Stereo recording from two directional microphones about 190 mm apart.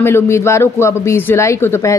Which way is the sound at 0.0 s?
15° left (ahead or behind).